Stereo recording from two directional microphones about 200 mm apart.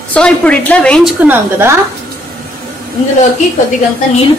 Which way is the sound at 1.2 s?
5° right (ahead or behind).